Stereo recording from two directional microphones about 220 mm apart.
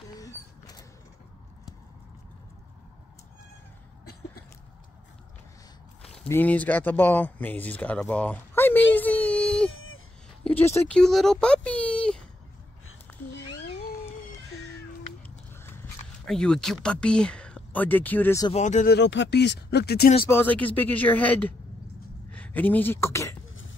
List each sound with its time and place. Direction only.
0.1 s a sound: 15° left (ahead or behind)
6.1 s speech: 10° left (ahead or behind)
8.9 s whimper: 5° left (ahead or behind)
10.4 s speech: 10° left (ahead or behind)
15.2 s a sound: 10° left (ahead or behind)
16.3 s speech: 5° left (ahead or behind)
18.5 s speech: 35° left (ahead or behind)
18.9 s speech: 50° left (ahead or behind)
20.2 s a woman's voice: 10° left (ahead or behind)